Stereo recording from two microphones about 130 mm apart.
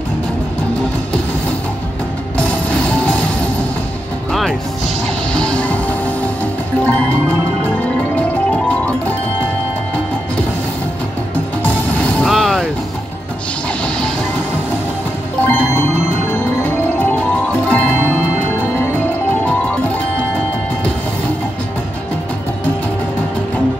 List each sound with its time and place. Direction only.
2.7 s music: 10° left (ahead or behind)
4.3 s music: centre (ahead or behind)
12.0 s music: 10° left (ahead or behind)
15.4 s music: 15° left (ahead or behind)